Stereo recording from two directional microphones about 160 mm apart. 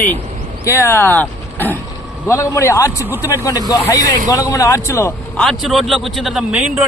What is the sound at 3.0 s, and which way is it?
Speech, 15° right (ahead or behind).